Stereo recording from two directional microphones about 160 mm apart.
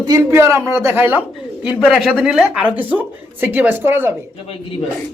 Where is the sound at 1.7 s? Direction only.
Centre (ahead or behind).